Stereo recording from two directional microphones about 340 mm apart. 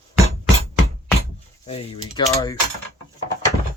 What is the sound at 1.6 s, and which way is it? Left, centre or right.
Speech, centre.